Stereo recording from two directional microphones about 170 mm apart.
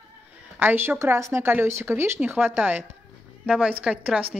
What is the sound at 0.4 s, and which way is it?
A woman's voice, 10° right (ahead or behind).